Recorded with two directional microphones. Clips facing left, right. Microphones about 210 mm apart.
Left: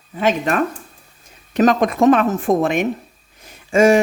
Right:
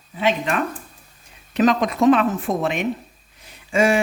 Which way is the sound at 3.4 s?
45° left (ahead or behind).